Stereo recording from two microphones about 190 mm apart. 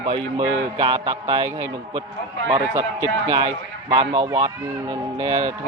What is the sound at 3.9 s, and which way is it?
Speech, 25° right (ahead or behind).